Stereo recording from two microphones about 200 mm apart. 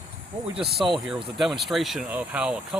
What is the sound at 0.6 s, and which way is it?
Speech, centre (ahead or behind).